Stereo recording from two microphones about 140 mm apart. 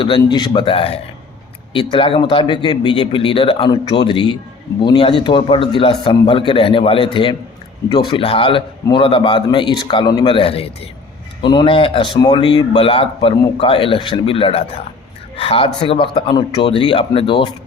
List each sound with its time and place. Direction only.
0.0 s a man's voice: 35° left (ahead or behind)